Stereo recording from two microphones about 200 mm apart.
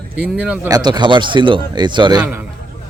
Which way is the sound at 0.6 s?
20° right (ahead or behind).